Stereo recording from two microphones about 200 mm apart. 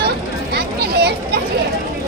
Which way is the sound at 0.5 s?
55° right (ahead or behind).